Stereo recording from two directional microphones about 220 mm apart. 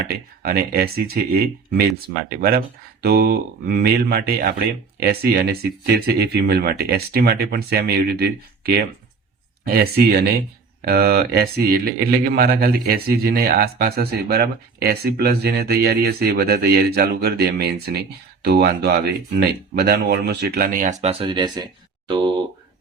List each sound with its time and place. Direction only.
0.0 s speech: 45° right (ahead or behind)
21.0 s speech: 25° right (ahead or behind)